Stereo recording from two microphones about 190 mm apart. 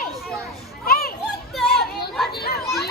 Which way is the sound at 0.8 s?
50° left (ahead or behind).